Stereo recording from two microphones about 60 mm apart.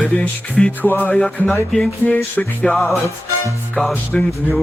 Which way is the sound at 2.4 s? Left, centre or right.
Centre.